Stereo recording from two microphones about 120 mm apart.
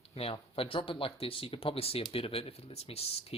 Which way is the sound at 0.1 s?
55° left (ahead or behind).